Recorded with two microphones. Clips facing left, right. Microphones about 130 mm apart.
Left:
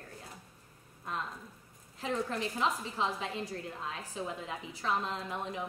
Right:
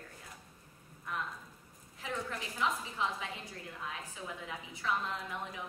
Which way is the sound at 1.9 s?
35° left (ahead or behind).